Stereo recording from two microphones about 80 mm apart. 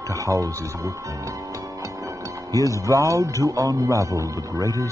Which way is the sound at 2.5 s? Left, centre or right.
Right.